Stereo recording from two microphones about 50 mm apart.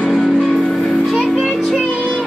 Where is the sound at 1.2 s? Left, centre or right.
Centre.